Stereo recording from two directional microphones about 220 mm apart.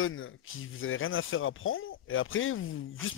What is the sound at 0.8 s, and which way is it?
Speech, 65° left (ahead or behind).